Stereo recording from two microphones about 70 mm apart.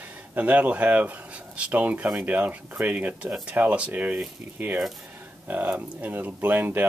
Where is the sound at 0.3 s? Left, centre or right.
Right.